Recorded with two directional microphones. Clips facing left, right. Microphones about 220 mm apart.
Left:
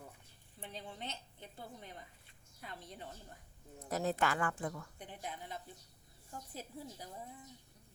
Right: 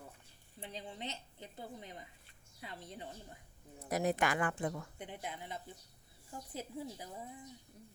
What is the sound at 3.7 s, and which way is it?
A woman's voice, 15° right (ahead or behind).